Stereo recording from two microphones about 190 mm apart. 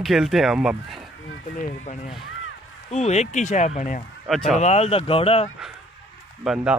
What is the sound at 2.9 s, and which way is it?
Speech, 35° left (ahead or behind).